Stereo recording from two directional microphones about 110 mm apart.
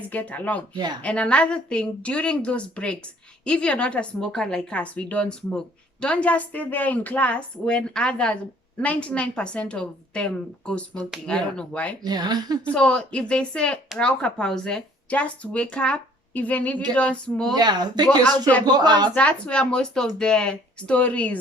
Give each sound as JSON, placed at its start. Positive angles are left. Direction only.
{"t": 0.1, "sound": "a woman's voice", "side_deg": 15}
{"t": 12.0, "sound": "a woman's voice", "side_deg": -40}
{"t": 12.7, "sound": "a woman's voice", "side_deg": 10}
{"t": 17.5, "sound": "a woman's voice", "side_deg": -40}
{"t": 19.1, "sound": "a woman's voice", "side_deg": 10}